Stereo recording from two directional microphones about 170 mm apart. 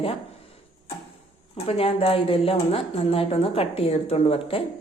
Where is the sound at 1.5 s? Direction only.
35° left (ahead or behind).